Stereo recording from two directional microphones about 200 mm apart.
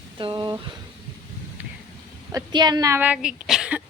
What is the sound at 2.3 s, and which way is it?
Speech, 20° right (ahead or behind).